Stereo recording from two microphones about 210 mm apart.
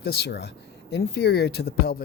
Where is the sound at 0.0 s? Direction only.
50° left (ahead or behind).